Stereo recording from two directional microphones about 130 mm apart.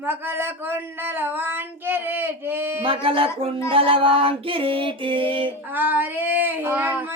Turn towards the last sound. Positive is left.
turn(degrees=-15)  # may be behind; listen again after turning